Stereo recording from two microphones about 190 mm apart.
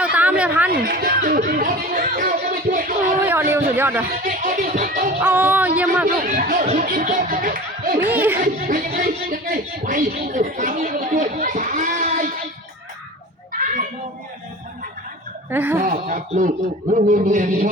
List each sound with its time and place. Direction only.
0.0 s a sound: 5° right (ahead or behind)
0.7 s speech: 55° right (ahead or behind)
3.8 s speech: 10° right (ahead or behind)
4.2 s speech: 45° right (ahead or behind)
5.2 s speech: 10° right (ahead or behind)
6.1 s speech: 45° right (ahead or behind)
13.5 s children playing: 45° right (ahead or behind)
15.4 s speech: 10° right (ahead or behind)
15.8 s speech: 45° right (ahead or behind)